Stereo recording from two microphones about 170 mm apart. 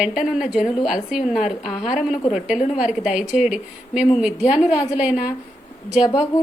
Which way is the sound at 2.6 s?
40° left (ahead or behind).